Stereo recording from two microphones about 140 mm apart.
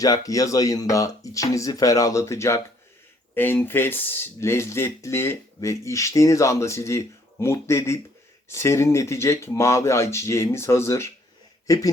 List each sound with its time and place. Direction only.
0.0 s speech: 25° left (ahead or behind)